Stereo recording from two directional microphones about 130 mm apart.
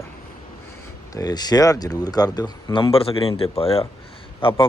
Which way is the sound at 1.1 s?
30° left (ahead or behind).